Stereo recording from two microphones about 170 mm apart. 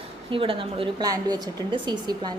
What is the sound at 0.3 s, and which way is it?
A woman's voice, 30° right (ahead or behind).